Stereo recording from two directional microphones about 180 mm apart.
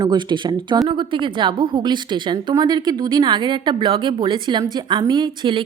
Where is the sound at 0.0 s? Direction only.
25° right (ahead or behind).